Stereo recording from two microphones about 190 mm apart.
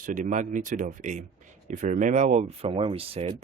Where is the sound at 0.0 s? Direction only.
45° right (ahead or behind).